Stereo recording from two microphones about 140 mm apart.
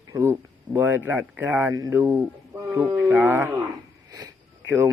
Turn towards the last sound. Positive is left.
turn(degrees=-20)  # may be behind; listen again after turning